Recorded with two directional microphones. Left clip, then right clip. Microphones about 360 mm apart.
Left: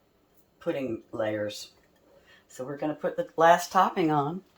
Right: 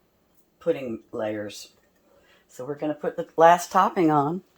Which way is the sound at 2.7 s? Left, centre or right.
Centre.